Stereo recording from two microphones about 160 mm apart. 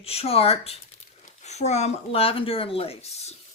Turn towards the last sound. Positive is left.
turn(degrees=40)  # may be behind; listen again after turning